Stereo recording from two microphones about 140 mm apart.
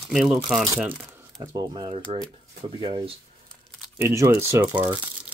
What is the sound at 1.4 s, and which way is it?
Speech, 30° right (ahead or behind).